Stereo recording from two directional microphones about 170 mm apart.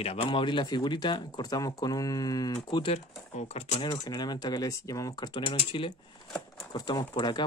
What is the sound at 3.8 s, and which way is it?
Speech, 25° left (ahead or behind).